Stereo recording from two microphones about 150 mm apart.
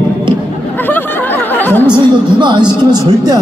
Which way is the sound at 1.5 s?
10° left (ahead or behind).